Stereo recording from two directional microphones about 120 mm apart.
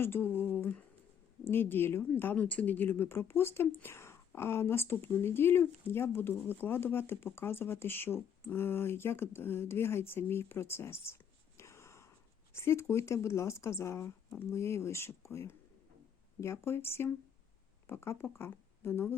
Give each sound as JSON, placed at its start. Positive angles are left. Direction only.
{"t": 0.0, "sound": "a sound", "side_deg": 20}
{"t": 1.5, "sound": "speech", "side_deg": 20}
{"t": 11.5, "sound": "whispering", "side_deg": 25}
{"t": 12.5, "sound": "speech", "side_deg": 20}